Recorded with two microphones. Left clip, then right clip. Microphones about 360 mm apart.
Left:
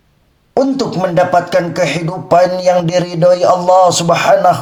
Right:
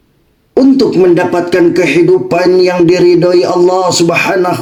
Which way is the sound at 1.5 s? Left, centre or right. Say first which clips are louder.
Right 5 dB; left.